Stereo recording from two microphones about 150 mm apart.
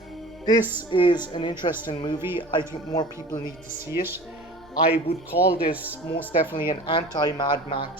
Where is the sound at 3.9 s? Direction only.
15° right (ahead or behind).